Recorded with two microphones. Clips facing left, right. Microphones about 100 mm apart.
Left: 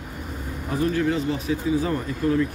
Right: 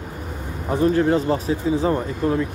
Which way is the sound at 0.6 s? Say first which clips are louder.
Right 5 dB; 35° right (ahead or behind).